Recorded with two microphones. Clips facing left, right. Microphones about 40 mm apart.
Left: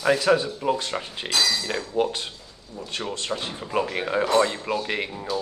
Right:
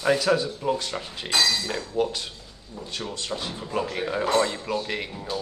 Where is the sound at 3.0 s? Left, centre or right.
Left.